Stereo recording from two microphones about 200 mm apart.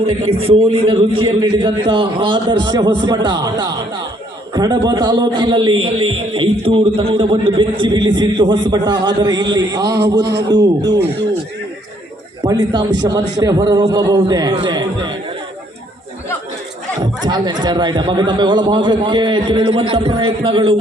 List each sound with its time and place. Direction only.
0.0 s a man's voice: 30° right (ahead or behind)
12.4 s a man's voice: 20° right (ahead or behind)
17.2 s a man's voice: 20° right (ahead or behind)